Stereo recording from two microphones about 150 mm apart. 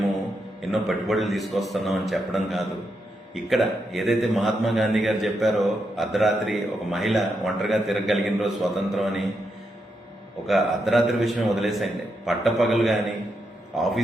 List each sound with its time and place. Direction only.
0.6 s a man's voice: centre (ahead or behind)
10.4 s a man's voice: centre (ahead or behind)